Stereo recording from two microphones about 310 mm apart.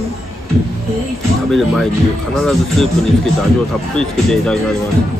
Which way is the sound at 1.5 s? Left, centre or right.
Centre.